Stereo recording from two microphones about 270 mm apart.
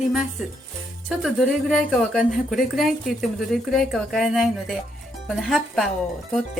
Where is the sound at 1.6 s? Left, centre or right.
Centre.